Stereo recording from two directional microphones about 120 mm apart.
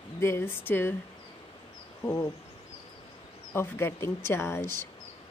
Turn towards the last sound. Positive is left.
turn(degrees=20)  # may be behind; listen again after turning